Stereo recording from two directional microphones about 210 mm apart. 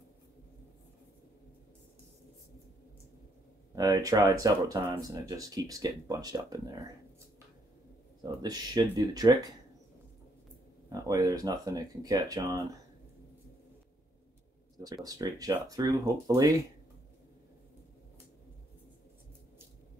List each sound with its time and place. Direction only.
3.7 s speech: 15° right (ahead or behind)
8.2 s speech: 20° right (ahead or behind)
10.9 s speech: 20° right (ahead or behind)
15.0 s speech: 20° right (ahead or behind)